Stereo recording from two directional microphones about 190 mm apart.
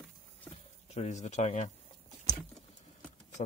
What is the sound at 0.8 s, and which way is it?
Speech, 35° left (ahead or behind).